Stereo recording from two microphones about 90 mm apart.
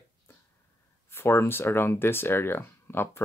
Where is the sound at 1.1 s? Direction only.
25° left (ahead or behind).